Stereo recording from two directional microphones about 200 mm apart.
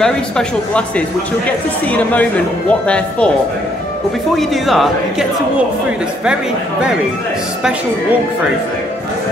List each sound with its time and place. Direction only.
0.0 s speech: 5° left (ahead or behind)
2.7 s speech: 5° left (ahead or behind)
4.4 s speech: centre (ahead or behind)